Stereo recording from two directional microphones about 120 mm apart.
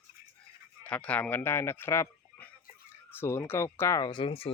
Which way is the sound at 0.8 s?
10° left (ahead or behind).